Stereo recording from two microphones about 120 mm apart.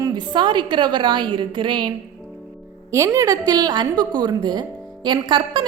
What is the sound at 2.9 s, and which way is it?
A woman's voice, 25° right (ahead or behind).